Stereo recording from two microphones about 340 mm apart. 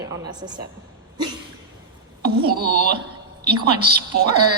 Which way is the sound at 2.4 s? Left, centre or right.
Right.